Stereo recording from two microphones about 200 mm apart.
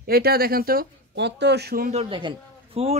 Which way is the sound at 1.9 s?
30° right (ahead or behind).